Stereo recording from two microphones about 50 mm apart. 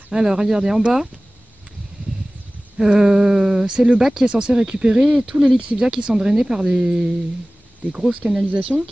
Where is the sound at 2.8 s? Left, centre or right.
Centre.